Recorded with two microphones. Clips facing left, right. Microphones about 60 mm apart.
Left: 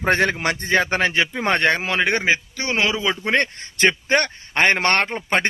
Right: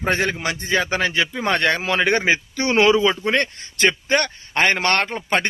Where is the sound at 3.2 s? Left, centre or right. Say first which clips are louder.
Even; left.